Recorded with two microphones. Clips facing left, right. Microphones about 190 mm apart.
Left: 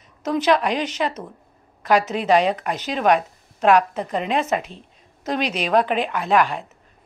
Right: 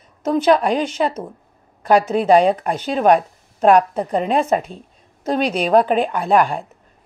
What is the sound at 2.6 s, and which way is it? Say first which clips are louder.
A woman's voice: right 4 dB; 35° right (ahead or behind).